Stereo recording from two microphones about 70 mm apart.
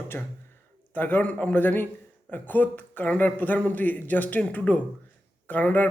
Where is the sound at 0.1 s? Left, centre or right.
Left.